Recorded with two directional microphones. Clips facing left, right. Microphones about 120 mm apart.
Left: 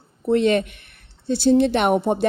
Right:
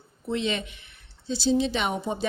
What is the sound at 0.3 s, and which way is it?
Speech, 55° left (ahead or behind).